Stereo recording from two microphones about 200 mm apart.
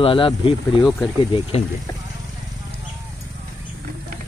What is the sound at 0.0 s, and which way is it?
Speech, 25° left (ahead or behind).